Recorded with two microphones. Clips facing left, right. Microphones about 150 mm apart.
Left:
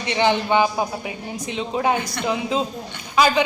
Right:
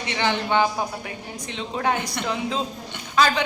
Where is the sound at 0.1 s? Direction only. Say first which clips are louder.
Left 4 dB; 15° left (ahead or behind).